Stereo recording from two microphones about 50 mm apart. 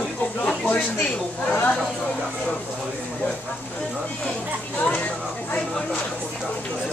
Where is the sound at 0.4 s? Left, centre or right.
Left.